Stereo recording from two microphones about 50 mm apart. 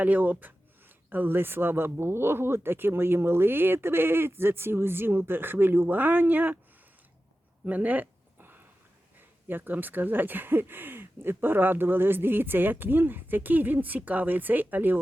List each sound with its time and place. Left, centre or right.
0.0 s speech: right
7.6 s a sound: right
9.1 s speech: right